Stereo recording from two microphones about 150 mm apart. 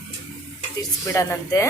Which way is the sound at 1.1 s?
20° left (ahead or behind).